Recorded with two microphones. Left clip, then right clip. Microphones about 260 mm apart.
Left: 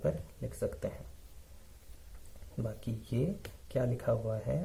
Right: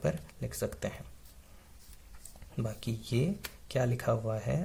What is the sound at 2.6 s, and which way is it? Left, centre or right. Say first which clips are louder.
Speech: right 2 dB; right.